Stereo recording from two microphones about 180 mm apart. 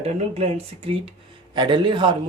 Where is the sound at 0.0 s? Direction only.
35° right (ahead or behind).